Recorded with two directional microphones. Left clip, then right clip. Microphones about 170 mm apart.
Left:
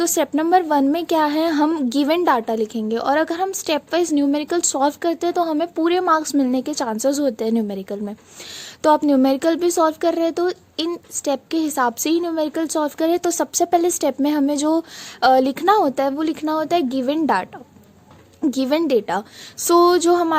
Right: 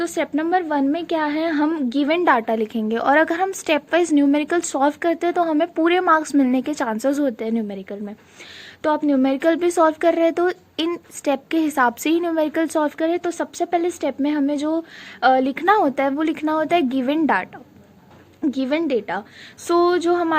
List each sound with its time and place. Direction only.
0.1 s speech: 45° left (ahead or behind)
2.2 s speech: 35° left (ahead or behind)
6.4 s a woman's voice: 30° left (ahead or behind)
7.2 s speech: 40° left (ahead or behind)
11.7 s a woman's voice: 30° left (ahead or behind)
12.8 s speech: 50° left (ahead or behind)
15.2 s speech: 50° left (ahead or behind)
15.8 s speech: 30° left (ahead or behind)
18.6 s speech: 55° left (ahead or behind)